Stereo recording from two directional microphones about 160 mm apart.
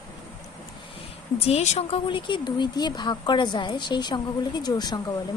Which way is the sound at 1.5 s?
40° left (ahead or behind).